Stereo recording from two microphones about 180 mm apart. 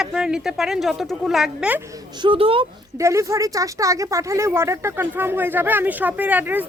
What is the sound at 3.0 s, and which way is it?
Speech, 15° right (ahead or behind).